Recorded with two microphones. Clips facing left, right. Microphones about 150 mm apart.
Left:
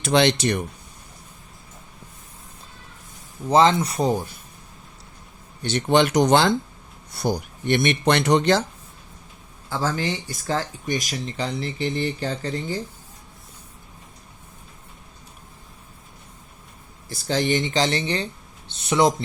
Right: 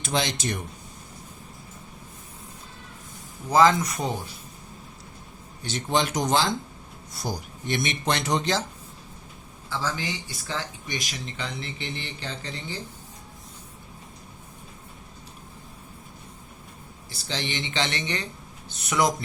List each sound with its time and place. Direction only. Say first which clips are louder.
0.0 s speech: left 9 dB; 70° left (ahead or behind)
3.5 s speech: left 2 dB; 30° left (ahead or behind)
5.6 s speech: left 7 dB; 65° left (ahead or behind)
9.6 s speech: left 5 dB; 45° left (ahead or behind)
17.1 s speech: left 10 dB; 45° left (ahead or behind); by 19.1 s 30° left (ahead or behind)